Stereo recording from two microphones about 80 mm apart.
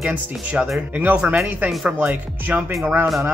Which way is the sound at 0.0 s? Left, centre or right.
Centre.